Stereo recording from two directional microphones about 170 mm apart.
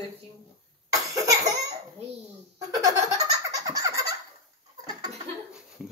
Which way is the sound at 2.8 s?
20° right (ahead or behind).